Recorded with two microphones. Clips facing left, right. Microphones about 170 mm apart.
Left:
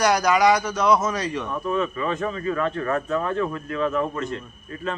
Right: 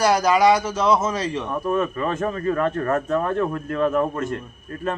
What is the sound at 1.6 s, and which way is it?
Speech, 50° right (ahead or behind).